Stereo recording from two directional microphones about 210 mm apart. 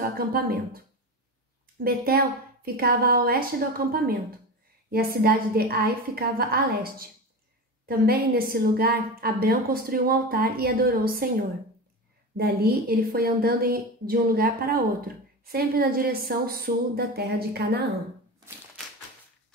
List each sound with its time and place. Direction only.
0.0 s a woman's voice: 45° right (ahead or behind)
12.4 s a woman's voice: 45° right (ahead or behind)